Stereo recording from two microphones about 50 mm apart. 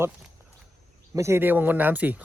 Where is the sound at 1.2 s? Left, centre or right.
Right.